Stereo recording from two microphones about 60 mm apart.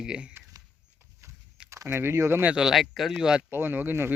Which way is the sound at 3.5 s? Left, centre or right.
Right.